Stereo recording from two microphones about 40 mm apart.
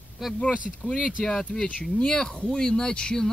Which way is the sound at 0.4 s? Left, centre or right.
Left.